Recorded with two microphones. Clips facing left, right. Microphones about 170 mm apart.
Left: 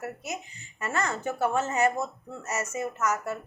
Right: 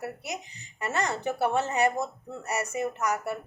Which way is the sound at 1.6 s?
35° right (ahead or behind).